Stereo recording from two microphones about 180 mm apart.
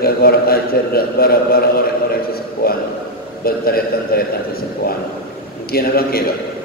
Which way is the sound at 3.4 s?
55° left (ahead or behind).